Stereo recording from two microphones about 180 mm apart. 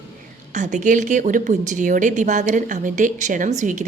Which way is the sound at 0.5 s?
45° right (ahead or behind).